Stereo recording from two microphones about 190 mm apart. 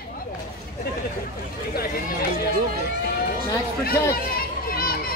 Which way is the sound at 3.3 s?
55° left (ahead or behind).